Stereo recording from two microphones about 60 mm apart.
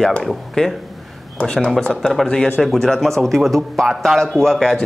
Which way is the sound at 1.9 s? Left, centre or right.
Centre.